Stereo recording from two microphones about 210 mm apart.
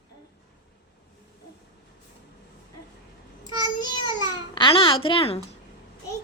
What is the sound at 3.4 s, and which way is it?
Speech, 20° left (ahead or behind).